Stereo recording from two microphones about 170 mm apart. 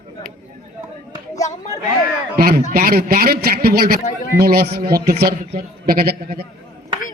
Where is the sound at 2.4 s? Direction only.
60° right (ahead or behind).